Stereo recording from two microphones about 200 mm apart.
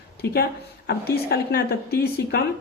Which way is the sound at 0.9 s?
55° left (ahead or behind).